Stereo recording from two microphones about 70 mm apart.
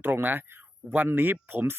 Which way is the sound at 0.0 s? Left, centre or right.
Right.